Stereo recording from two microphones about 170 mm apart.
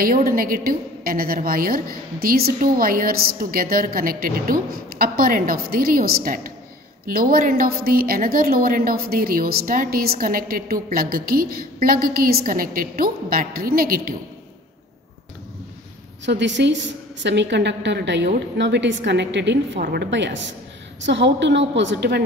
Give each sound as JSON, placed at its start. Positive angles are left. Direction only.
{"t": 0.0, "sound": "a woman's voice", "side_deg": -55}
{"t": 16.3, "sound": "a woman's voice", "side_deg": -90}